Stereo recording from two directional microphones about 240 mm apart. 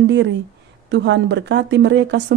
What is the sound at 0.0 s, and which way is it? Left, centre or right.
Speech, right.